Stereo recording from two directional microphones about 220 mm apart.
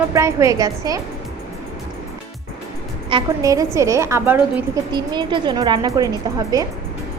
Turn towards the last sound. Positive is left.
turn(degrees=-15)  # may be behind; listen again after turning